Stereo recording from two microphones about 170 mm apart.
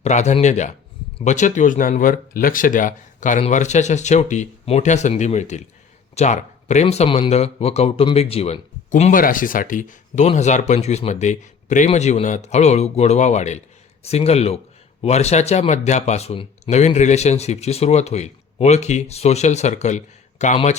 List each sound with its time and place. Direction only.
0.0 s speech: 45° left (ahead or behind)